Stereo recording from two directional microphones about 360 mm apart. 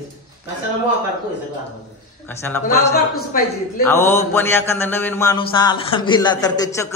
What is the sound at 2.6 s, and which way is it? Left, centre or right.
Speech, left.